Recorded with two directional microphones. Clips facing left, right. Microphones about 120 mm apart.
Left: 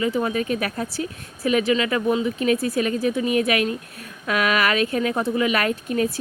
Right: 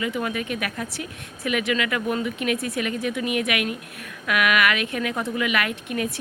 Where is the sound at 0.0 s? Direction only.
30° left (ahead or behind).